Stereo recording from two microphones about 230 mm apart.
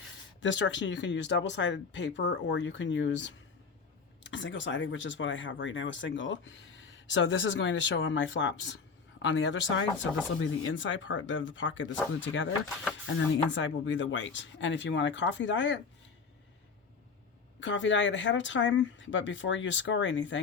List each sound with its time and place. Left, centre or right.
0.4 s speech: left
13.5 s speech: left
17.6 s speech: left